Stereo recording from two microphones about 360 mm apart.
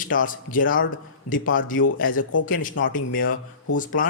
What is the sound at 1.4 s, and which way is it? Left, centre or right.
Speech, left.